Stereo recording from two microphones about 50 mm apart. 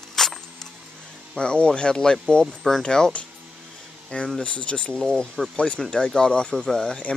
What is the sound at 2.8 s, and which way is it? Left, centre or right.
Speech, centre.